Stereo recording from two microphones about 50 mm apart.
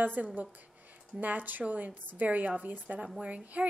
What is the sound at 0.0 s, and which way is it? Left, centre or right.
A woman's voice, right.